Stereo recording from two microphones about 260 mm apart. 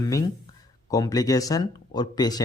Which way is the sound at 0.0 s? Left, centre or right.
Centre.